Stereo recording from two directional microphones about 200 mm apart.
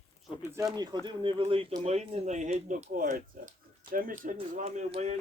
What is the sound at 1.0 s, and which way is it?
Speech, 25° right (ahead or behind).